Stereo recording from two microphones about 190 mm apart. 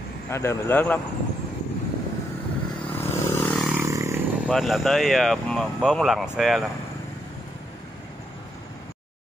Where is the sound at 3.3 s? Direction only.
10° left (ahead or behind).